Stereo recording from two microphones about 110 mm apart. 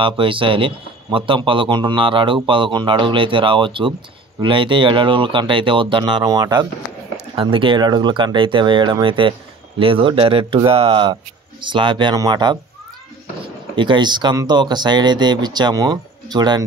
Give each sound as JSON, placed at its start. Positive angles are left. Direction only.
{"t": 0.0, "sound": "a man's voice", "side_deg": -50}
{"t": 6.2, "sound": "speech", "side_deg": -35}
{"t": 7.3, "sound": "a man's voice", "side_deg": -50}
{"t": 13.7, "sound": "speech", "side_deg": -45}